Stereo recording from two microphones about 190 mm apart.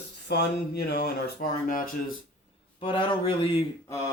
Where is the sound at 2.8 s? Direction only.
25° left (ahead or behind).